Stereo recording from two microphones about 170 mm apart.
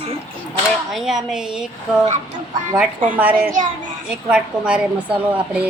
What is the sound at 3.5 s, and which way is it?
Speech, 50° right (ahead or behind).